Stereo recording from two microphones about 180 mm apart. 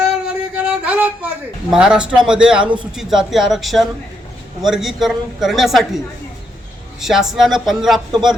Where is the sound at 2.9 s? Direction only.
Centre (ahead or behind).